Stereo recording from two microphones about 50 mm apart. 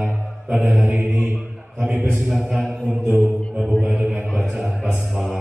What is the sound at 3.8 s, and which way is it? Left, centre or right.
Speech, right.